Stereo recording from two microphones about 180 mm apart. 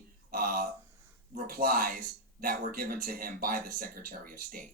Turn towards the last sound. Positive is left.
turn(degrees=-50)  # may be behind; listen again after turning